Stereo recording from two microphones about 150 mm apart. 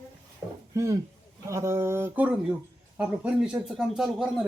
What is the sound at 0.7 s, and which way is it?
Speech, 20° right (ahead or behind).